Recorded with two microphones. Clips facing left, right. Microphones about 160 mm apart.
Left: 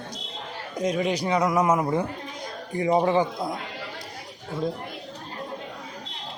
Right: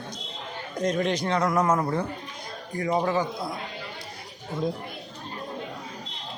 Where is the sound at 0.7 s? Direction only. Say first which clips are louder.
Even; 5° left (ahead or behind).